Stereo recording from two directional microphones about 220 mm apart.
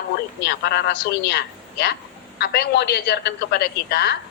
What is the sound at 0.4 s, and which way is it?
A woman's voice, 45° left (ahead or behind).